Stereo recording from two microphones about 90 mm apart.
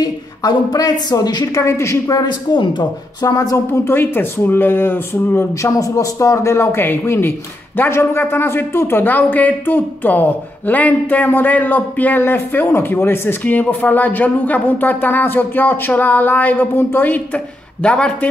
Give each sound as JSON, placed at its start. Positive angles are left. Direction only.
{"t": 0.0, "sound": "a woman's voice", "side_deg": 45}
{"t": 2.2, "sound": "a man's voice", "side_deg": 60}
{"t": 5.8, "sound": "a man's voice", "side_deg": 40}